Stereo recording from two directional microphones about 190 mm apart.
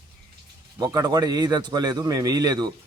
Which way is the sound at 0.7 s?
20° right (ahead or behind).